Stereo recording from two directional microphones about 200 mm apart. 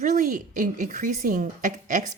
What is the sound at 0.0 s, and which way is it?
Speech, 40° right (ahead or behind).